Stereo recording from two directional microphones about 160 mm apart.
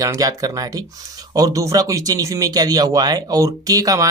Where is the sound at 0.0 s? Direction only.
20° right (ahead or behind).